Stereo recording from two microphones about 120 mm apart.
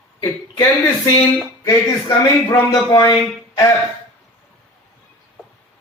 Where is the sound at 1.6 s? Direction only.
25° left (ahead or behind).